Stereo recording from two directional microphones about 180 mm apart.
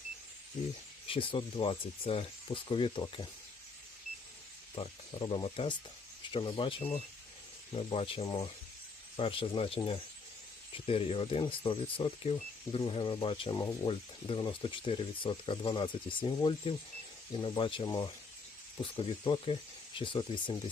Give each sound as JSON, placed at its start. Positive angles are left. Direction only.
{"t": 1.0, "sound": "speech", "side_deg": 30}
{"t": 4.7, "sound": "speech", "side_deg": 30}